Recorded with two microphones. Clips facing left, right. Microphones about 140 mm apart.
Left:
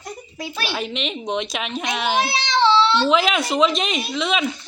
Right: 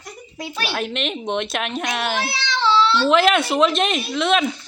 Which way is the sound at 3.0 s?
Centre (ahead or behind).